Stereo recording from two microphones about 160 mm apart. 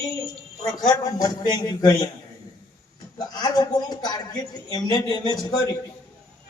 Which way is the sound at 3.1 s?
25° left (ahead or behind).